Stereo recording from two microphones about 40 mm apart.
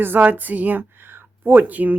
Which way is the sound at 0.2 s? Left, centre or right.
Right.